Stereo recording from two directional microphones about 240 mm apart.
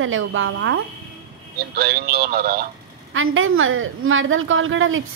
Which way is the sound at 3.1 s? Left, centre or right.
Right.